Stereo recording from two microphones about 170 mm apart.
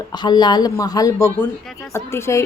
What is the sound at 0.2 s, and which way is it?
A woman's voice, 25° left (ahead or behind).